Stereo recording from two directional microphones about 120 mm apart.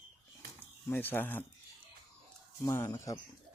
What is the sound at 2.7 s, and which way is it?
Speech, 25° left (ahead or behind).